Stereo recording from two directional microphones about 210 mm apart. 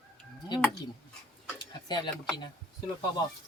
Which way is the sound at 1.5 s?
20° left (ahead or behind).